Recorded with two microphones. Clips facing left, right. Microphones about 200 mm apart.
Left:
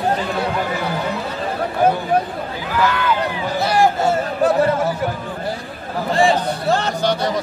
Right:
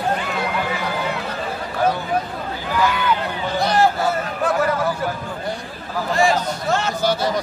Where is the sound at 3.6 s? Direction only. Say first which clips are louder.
Left 1 dB; 10° left (ahead or behind).